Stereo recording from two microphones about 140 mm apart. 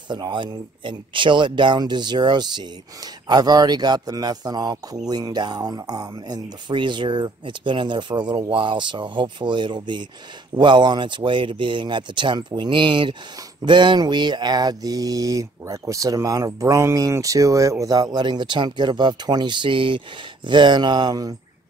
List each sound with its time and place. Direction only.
0.1 s speech: 35° right (ahead or behind)
13.7 s a sound: 35° right (ahead or behind)
20.4 s speech: 35° right (ahead or behind)